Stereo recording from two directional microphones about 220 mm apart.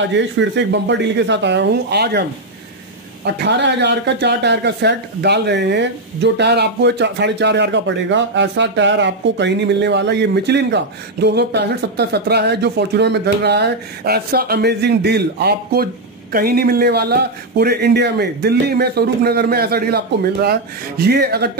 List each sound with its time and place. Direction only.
0.1 s speech: 55° right (ahead or behind)
3.4 s speech: 50° right (ahead or behind)
21.0 s speech: 45° right (ahead or behind)